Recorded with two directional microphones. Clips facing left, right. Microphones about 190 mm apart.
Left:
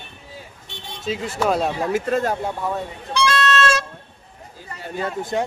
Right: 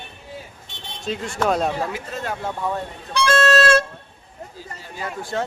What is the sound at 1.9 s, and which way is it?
Speech, 45° left (ahead or behind).